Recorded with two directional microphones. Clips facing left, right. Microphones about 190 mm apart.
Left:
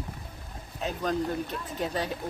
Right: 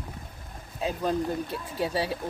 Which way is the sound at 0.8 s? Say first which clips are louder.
Right 2 dB; 10° right (ahead or behind).